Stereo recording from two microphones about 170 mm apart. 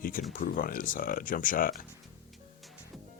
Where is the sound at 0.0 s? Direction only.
55° left (ahead or behind).